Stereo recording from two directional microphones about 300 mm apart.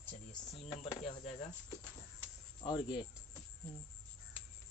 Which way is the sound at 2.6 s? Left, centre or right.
Centre.